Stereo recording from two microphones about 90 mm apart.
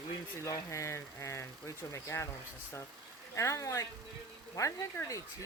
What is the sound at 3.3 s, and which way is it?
Speech, 35° left (ahead or behind).